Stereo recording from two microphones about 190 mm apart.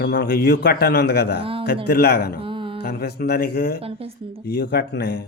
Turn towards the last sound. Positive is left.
turn(degrees=55)  # may be behind; listen again after turning